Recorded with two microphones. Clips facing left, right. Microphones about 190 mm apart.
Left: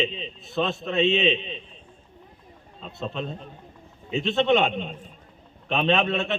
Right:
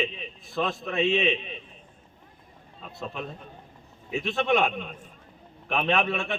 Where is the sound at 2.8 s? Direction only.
25° left (ahead or behind).